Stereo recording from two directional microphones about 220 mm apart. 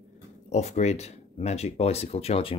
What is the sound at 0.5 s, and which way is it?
Speech, 30° left (ahead or behind).